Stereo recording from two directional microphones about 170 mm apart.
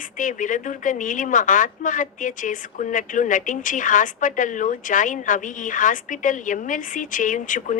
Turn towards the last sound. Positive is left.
turn(degrees=50)  # may be behind; listen again after turning